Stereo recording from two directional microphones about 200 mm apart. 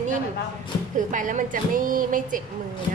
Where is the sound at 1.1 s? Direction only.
40° right (ahead or behind).